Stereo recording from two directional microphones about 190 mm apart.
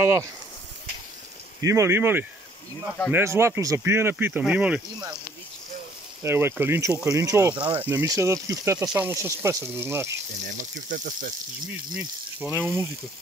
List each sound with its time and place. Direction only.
0.0 s speech: 15° right (ahead or behind)
1.6 s speech: 15° right (ahead or behind)
6.2 s speech: 15° right (ahead or behind)
7.5 s speech: 25° right (ahead or behind)
7.8 s speech: 15° right (ahead or behind)
10.6 s speech: 45° right (ahead or behind)
11.6 s speech: 5° right (ahead or behind)